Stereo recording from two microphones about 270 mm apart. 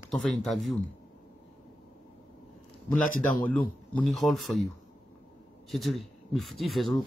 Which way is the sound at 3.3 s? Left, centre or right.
Centre.